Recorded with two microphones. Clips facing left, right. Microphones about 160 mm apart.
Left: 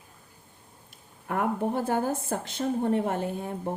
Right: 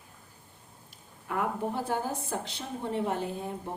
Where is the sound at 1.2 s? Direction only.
50° left (ahead or behind).